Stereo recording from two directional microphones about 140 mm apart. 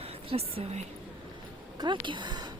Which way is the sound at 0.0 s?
45° right (ahead or behind).